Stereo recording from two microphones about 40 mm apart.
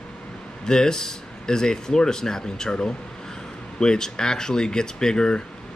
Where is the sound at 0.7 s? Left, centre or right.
Centre.